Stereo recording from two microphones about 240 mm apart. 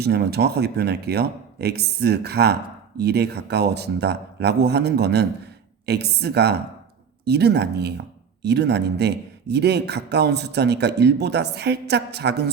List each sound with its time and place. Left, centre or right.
0.0 s speech: right